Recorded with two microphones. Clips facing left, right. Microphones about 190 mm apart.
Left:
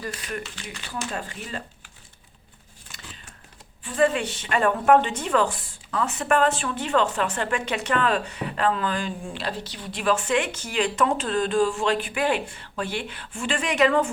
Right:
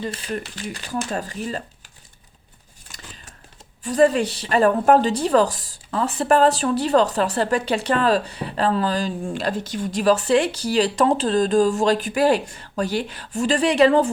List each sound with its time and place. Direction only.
0.0 s a woman's voice: 30° right (ahead or behind)
2.9 s a sound: 40° right (ahead or behind)
3.8 s a woman's voice: 40° right (ahead or behind)